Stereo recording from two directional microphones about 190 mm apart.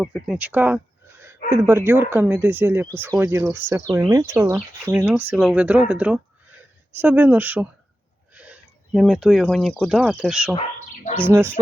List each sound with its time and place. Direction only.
0.0 s speech: centre (ahead or behind)
10.8 s bird: 40° left (ahead or behind)
11.3 s speech: 10° right (ahead or behind)